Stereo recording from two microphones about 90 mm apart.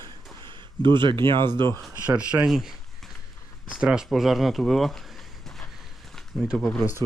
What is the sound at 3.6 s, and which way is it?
Speech, 10° right (ahead or behind).